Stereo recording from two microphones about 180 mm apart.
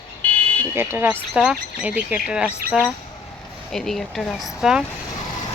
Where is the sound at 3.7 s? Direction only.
Centre (ahead or behind).